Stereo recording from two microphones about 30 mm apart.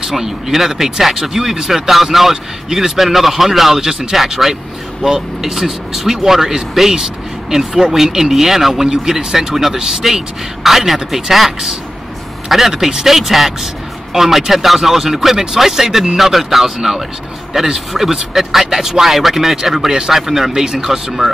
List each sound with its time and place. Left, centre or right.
0.0 s speech: centre
20.6 s speech: right